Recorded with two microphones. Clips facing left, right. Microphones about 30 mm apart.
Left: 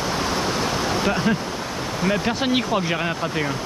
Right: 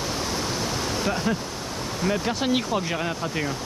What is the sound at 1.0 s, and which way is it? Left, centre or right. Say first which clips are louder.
Speech: left 3 dB; left.